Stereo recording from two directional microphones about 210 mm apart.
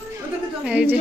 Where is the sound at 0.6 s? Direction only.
5° right (ahead or behind).